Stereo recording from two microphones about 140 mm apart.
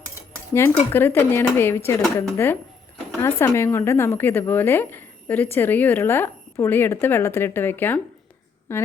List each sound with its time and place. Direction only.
0.5 s speech: 15° left (ahead or behind)